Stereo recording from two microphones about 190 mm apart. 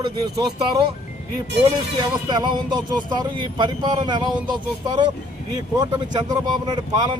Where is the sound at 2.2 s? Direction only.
25° right (ahead or behind).